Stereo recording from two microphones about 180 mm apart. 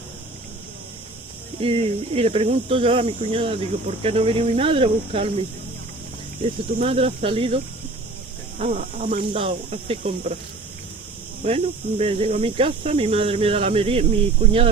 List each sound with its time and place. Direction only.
1.6 s speech: 35° right (ahead or behind)
6.7 s speech: 35° right (ahead or behind)
9.3 s speech: 35° right (ahead or behind)
11.4 s speech: 35° right (ahead or behind)